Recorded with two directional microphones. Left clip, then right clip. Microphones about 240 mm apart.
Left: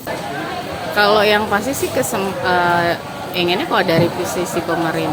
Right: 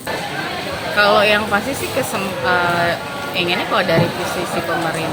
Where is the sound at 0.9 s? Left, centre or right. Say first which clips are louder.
Even; left.